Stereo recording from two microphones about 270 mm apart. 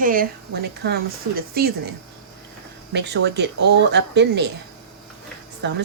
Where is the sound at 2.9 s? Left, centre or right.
Right.